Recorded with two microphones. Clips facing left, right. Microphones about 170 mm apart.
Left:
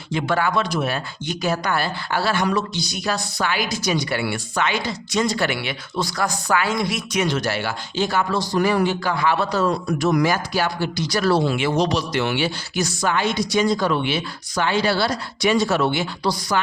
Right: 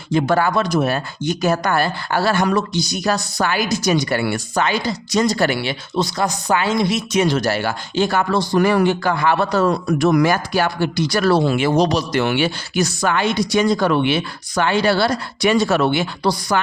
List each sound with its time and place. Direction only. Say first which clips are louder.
0.1 s speech: right 4 dB; 40° right (ahead or behind)
6.0 s speech: right 3 dB; 20° right (ahead or behind); by 16.6 s 60° right (ahead or behind)